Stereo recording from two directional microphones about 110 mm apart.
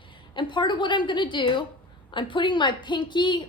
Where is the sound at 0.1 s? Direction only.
45° left (ahead or behind).